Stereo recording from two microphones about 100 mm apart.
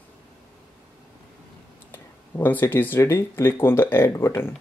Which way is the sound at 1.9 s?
20° left (ahead or behind).